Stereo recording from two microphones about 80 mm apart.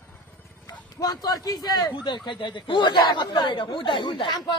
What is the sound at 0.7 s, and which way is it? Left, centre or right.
Speech, left.